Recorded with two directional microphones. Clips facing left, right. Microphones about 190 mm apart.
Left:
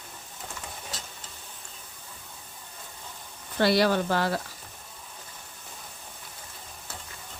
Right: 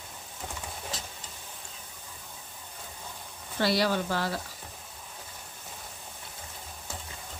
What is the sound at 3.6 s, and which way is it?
Speech, 60° left (ahead or behind).